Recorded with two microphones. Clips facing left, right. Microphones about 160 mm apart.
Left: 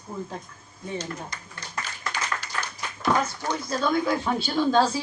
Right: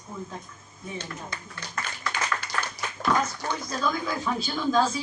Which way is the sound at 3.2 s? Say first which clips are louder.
Left 2 dB; 30° left (ahead or behind).